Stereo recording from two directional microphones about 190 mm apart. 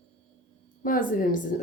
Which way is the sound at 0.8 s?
45° left (ahead or behind).